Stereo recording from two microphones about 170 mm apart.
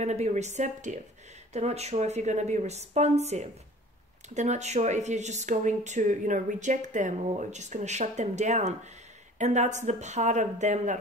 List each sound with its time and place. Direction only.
0.0 s speech: 40° right (ahead or behind)